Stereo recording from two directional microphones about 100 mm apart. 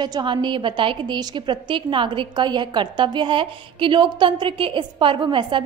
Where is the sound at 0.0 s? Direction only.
50° right (ahead or behind).